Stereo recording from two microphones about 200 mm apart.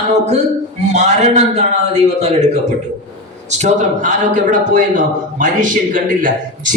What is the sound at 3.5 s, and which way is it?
A man's voice, 35° right (ahead or behind).